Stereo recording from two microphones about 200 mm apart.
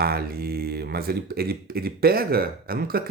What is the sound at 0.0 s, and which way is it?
Speech, 50° right (ahead or behind).